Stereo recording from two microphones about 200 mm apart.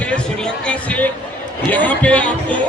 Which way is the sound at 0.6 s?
5° left (ahead or behind).